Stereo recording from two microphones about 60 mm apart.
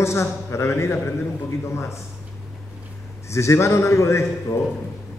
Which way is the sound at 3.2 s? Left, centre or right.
Left.